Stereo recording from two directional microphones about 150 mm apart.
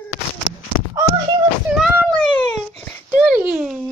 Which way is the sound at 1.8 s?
5° right (ahead or behind).